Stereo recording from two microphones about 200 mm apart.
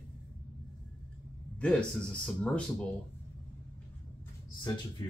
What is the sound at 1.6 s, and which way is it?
Speech, 5° left (ahead or behind).